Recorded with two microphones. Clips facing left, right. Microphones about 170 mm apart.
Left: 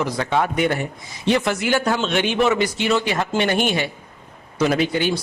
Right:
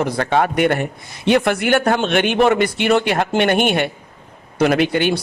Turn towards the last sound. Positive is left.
turn(degrees=-65)  # may be behind; listen again after turning